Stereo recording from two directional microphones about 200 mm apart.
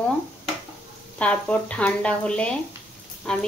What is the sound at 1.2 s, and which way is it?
A woman's voice, 5° left (ahead or behind).